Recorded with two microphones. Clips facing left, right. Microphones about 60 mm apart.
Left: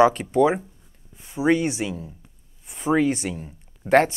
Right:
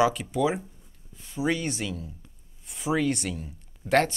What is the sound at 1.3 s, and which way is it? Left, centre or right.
Speech, centre.